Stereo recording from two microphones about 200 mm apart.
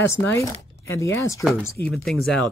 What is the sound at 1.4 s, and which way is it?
Speech, centre (ahead or behind).